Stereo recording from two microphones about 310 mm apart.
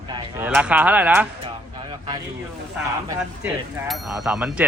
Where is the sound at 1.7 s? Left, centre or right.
Centre.